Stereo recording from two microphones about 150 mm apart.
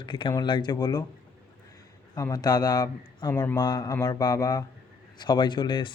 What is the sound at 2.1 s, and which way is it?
Speech, 25° left (ahead or behind).